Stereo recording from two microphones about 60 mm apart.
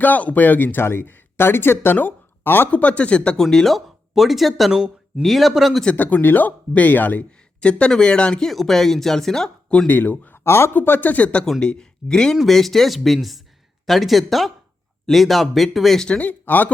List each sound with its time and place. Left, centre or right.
0.0 s speech: left
2.7 s speech: left
3.3 s speech: centre
4.7 s speech: centre
5.2 s speech: centre
5.8 s speech: left
8.4 s speech: centre
9.8 s speech: left
10.4 s speech: left
10.8 s speech: left; by 16.0 s centre
16.0 s speech: left